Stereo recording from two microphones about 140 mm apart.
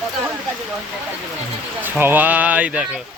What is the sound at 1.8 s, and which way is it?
Speech, 15° right (ahead or behind).